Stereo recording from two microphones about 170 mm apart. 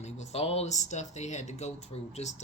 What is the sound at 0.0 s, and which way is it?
Speech, 40° left (ahead or behind).